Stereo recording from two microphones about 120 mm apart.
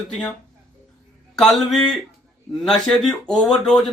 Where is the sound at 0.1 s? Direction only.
10° left (ahead or behind).